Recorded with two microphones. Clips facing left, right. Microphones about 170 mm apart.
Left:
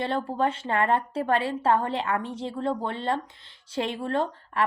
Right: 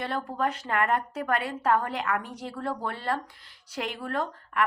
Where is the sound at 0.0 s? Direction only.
25° left (ahead or behind).